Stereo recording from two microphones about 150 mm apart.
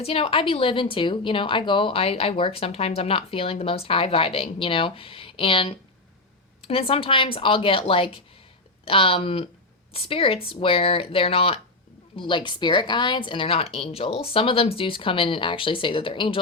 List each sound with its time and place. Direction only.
0.0 s a woman's voice: 40° left (ahead or behind)